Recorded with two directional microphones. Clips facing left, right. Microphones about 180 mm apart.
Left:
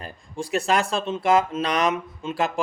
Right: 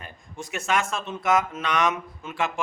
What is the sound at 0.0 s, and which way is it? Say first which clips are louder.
A man's voice: left 6 dB; 35° left (ahead or behind).